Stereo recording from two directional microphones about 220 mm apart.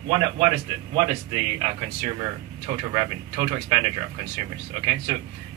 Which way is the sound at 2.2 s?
20° right (ahead or behind).